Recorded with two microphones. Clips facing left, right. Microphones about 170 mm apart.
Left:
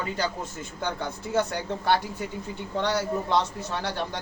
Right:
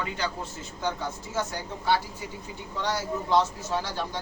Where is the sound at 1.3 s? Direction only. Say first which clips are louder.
Left 7 dB; 65° left (ahead or behind).